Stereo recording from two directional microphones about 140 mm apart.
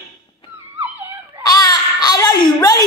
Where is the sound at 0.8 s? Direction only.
15° right (ahead or behind).